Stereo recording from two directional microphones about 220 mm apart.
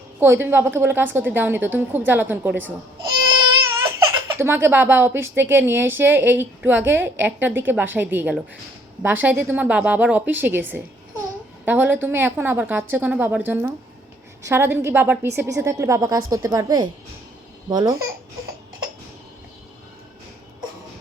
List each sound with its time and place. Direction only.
0.2 s a woman's voice: 10° right (ahead or behind)
3.0 s baby cry: 20° right (ahead or behind)
4.4 s a woman's voice: 10° right (ahead or behind)